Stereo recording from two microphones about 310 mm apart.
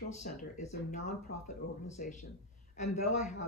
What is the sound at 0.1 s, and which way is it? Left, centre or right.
Speech, left.